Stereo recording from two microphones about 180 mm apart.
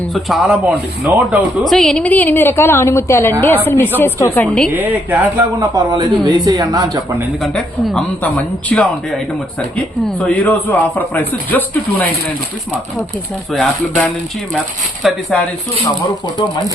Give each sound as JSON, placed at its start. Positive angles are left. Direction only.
{"t": 0.1, "sound": "speech", "side_deg": 0}
{"t": 4.7, "sound": "speech", "side_deg": -10}
{"t": 5.5, "sound": "speech", "side_deg": -20}
{"t": 7.4, "sound": "speech", "side_deg": 0}
{"t": 13.5, "sound": "speech", "side_deg": 0}